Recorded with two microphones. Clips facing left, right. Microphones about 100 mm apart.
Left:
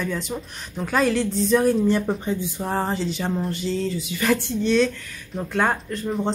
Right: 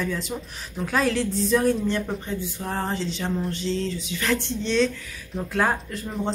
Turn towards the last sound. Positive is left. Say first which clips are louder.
# left 4 dB
turn(degrees=0)  # may be behind; listen again after turning